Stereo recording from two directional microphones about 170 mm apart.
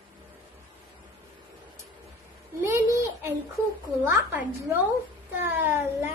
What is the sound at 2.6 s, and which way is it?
A child's voice, 15° right (ahead or behind).